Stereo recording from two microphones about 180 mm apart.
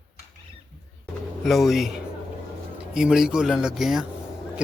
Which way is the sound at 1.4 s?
Centre (ahead or behind).